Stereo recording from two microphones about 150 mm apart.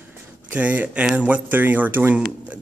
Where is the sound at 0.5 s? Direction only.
10° right (ahead or behind).